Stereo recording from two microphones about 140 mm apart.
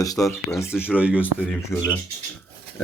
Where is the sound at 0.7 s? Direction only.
10° right (ahead or behind).